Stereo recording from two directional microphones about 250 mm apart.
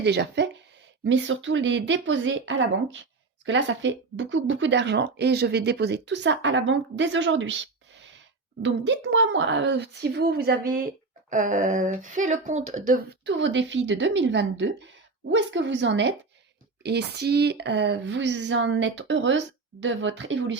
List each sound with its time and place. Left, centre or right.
0.0 s speech: right
13.2 s speech: right